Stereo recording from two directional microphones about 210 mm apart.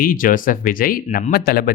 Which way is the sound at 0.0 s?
40° left (ahead or behind).